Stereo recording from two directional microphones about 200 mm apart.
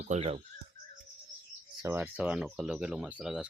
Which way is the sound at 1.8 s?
10° right (ahead or behind).